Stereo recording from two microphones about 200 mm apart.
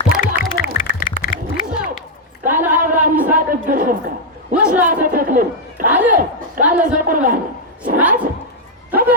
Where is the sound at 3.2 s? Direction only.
45° right (ahead or behind).